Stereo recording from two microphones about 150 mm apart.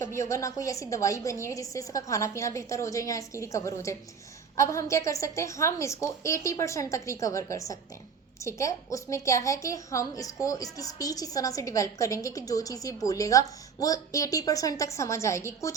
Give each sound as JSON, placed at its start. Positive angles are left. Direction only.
{"t": 0.0, "sound": "a woman's voice", "side_deg": 20}